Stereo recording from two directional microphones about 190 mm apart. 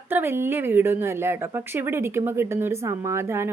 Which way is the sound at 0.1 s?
10° right (ahead or behind).